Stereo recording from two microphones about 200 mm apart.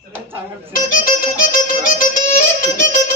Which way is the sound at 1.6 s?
40° left (ahead or behind).